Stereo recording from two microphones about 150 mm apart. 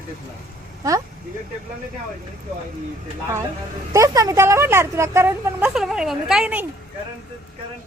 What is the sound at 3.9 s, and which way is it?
A woman's voice, 20° right (ahead or behind).